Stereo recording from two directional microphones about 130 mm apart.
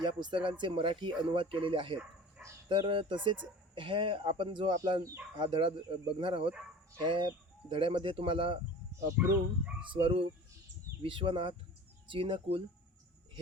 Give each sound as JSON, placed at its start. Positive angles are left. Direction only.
{"t": 0.0, "sound": "speech", "side_deg": -35}
{"t": 4.7, "sound": "speech", "side_deg": -25}
{"t": 9.8, "sound": "speech", "side_deg": -40}